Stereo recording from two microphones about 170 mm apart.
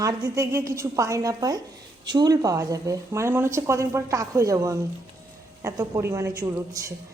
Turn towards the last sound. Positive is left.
turn(degrees=-20)  # may be behind; listen again after turning